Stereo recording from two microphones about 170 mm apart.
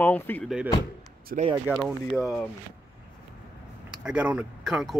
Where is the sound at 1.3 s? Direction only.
55° right (ahead or behind).